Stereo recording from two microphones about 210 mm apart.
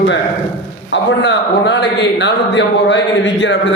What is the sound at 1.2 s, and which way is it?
A man's voice, 55° left (ahead or behind).